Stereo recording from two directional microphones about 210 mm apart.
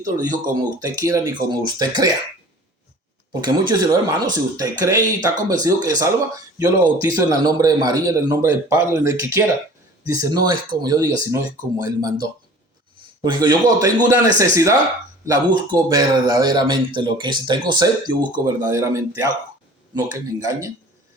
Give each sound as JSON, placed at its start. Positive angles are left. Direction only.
{"t": 0.6, "sound": "speech", "side_deg": -15}
{"t": 3.4, "sound": "speech", "side_deg": -20}
{"t": 13.2, "sound": "speech", "side_deg": -20}